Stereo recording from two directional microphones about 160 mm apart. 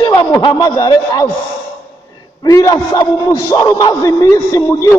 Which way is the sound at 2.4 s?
20° left (ahead or behind).